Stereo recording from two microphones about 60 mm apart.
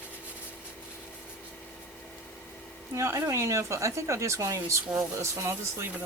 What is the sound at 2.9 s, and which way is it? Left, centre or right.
A woman's voice, right.